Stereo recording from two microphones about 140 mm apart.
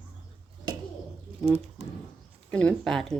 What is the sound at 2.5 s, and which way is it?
Speech, 5° left (ahead or behind).